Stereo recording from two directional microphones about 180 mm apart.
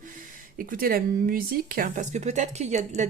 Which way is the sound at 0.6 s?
50° right (ahead or behind).